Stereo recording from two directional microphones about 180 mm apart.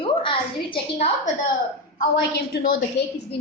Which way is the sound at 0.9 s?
40° left (ahead or behind).